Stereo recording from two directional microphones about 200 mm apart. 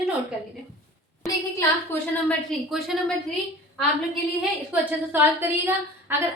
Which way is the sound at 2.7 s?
Centre (ahead or behind).